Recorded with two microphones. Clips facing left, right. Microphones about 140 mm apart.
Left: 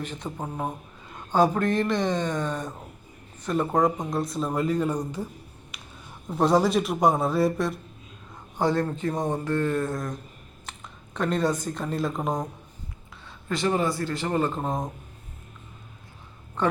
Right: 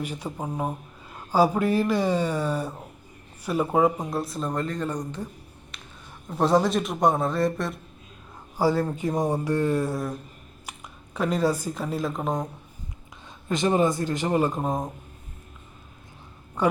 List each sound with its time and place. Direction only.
0.0 s speech: 10° right (ahead or behind)
13.2 s speech: 20° right (ahead or behind)
16.6 s speech: 10° right (ahead or behind)